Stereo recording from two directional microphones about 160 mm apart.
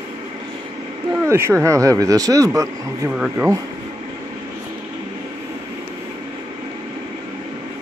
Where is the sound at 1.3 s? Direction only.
15° right (ahead or behind).